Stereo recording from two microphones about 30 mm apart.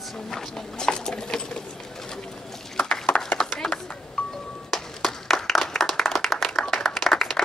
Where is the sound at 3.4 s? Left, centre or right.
Centre.